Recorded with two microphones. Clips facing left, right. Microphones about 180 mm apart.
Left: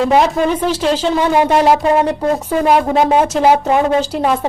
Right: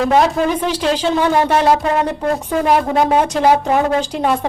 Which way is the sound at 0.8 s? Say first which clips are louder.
Left 1 dB; centre (ahead or behind).